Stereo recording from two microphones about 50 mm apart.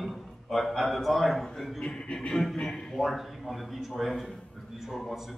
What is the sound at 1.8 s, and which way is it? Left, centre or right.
Music, centre.